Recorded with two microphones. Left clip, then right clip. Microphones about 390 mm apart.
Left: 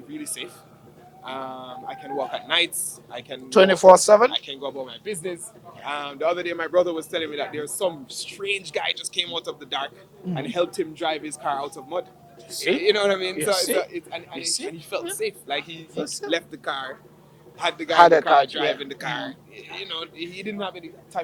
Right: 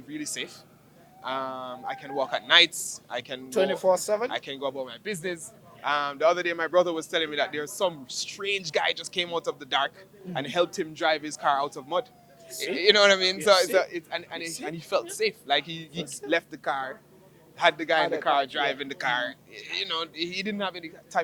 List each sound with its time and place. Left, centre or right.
0.1 s a sound: right
1.2 s a man's voice: right
3.5 s speech: left
4.3 s a man's voice: right
16.3 s a man's voice: right